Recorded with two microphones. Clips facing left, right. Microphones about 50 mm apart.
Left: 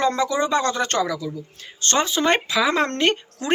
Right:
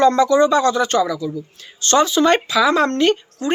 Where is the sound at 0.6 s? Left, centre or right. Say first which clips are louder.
Right 5 dB; left.